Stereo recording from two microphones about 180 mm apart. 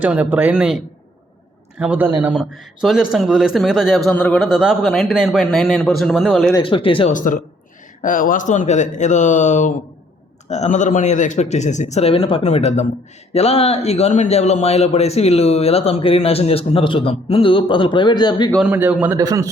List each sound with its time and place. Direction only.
0.0 s a man's voice: 10° right (ahead or behind)
1.8 s a man's voice: 10° right (ahead or behind)
6.6 s speech: 30° left (ahead or behind)
7.1 s a man's voice: 45° left (ahead or behind); by 18.5 s 25° left (ahead or behind)
18.7 s a man's voice: 10° right (ahead or behind)